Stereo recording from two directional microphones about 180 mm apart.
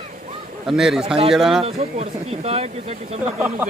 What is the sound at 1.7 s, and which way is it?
Speech, 35° right (ahead or behind).